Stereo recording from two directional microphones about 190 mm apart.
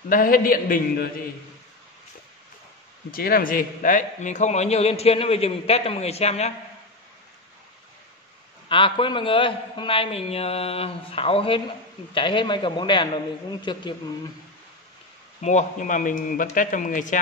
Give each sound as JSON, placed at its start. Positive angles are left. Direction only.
{"t": 0.1, "sound": "a man's voice", "side_deg": 50}
{"t": 3.1, "sound": "a man's voice", "side_deg": 50}
{"t": 8.6, "sound": "a man's voice", "side_deg": 25}
{"t": 15.4, "sound": "a man's voice", "side_deg": 40}